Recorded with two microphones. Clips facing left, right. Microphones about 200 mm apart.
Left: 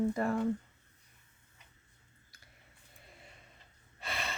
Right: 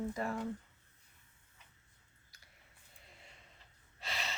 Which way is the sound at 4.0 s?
55° left (ahead or behind).